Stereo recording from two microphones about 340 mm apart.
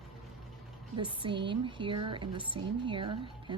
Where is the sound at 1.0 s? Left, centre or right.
Centre.